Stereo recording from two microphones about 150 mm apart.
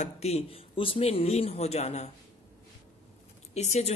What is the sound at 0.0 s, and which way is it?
Speech, 45° left (ahead or behind).